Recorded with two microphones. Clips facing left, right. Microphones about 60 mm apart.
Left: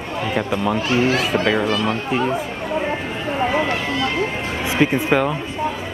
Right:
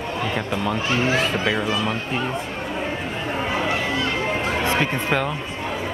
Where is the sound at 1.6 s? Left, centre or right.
Centre.